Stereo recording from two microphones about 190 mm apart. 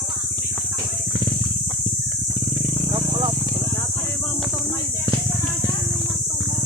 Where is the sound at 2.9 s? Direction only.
25° right (ahead or behind).